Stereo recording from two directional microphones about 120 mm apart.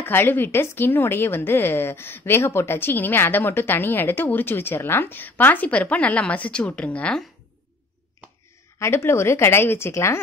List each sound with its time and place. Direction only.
0.0 s a woman's voice: 20° left (ahead or behind)
8.7 s speech: 20° left (ahead or behind)